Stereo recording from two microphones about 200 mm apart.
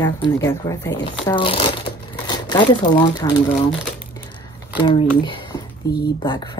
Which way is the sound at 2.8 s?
20° left (ahead or behind).